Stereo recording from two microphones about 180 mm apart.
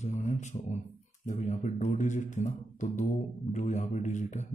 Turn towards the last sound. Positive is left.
turn(degrees=40)  # may be behind; listen again after turning